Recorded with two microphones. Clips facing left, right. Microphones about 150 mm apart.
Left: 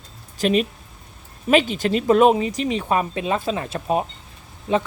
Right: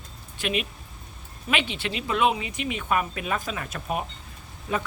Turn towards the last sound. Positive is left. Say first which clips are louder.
# left 8 dB
turn(degrees=25)  # may be behind; listen again after turning